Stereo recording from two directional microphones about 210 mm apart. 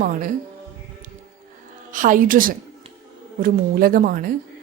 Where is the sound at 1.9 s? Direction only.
40° right (ahead or behind).